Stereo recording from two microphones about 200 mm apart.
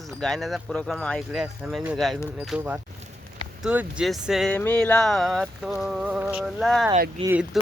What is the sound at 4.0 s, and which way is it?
Speech, centre (ahead or behind).